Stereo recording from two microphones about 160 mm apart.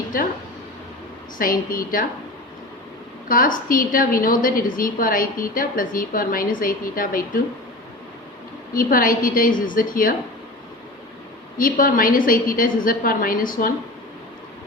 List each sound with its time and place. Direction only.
1.4 s a woman's voice: 60° left (ahead or behind)
3.2 s a woman's voice: 60° left (ahead or behind)
8.7 s a woman's voice: 60° left (ahead or behind)
11.5 s a woman's voice: 60° left (ahead or behind)